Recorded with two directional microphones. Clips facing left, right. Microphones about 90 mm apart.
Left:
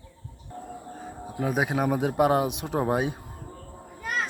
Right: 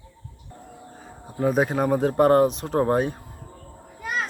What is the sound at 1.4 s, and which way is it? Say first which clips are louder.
Speech: right 4 dB; 5° left (ahead or behind).